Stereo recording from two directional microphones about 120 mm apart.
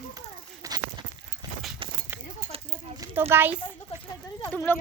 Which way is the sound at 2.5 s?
50° right (ahead or behind).